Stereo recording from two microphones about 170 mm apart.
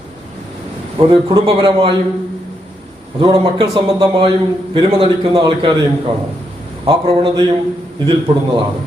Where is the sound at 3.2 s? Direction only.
30° right (ahead or behind).